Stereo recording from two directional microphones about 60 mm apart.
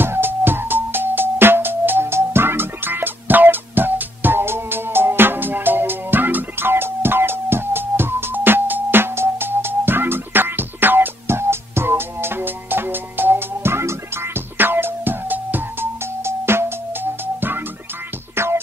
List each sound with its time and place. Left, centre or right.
0.0 s music: right
16.3 s music: right
18.3 s music: right